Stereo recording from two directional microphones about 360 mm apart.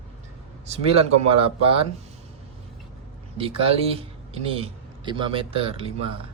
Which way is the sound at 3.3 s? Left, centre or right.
Centre.